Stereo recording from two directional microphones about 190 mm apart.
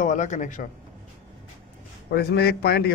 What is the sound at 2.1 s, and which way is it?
Speech, 60° left (ahead or behind).